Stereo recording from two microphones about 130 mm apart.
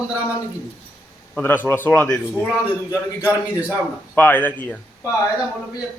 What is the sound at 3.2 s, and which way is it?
Speech, 10° right (ahead or behind).